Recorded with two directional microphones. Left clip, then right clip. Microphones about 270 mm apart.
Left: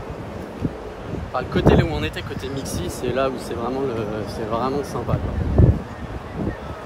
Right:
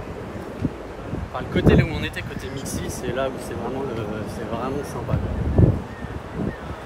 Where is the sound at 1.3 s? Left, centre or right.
Left.